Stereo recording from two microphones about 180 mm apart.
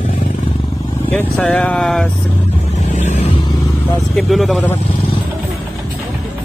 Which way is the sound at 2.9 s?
40° left (ahead or behind).